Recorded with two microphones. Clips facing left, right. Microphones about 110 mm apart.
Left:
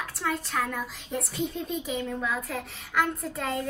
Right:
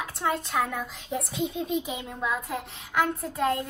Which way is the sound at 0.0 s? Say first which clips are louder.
Right 2 dB; 10° right (ahead or behind).